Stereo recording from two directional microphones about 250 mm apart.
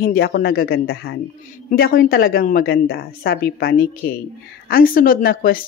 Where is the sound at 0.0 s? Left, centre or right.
Left.